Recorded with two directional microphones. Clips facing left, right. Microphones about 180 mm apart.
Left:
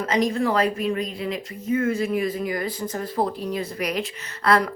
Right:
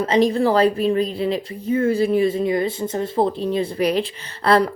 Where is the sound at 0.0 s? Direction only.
30° right (ahead or behind).